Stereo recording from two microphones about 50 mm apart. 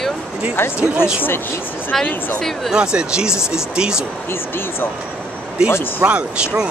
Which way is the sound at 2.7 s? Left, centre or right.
Centre.